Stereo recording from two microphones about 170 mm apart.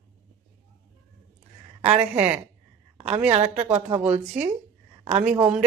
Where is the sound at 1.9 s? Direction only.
10° right (ahead or behind).